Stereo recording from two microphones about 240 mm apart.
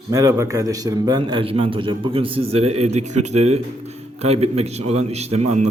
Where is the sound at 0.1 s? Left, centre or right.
Centre.